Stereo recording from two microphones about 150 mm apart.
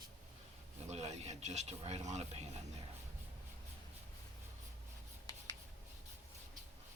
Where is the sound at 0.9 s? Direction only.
45° right (ahead or behind).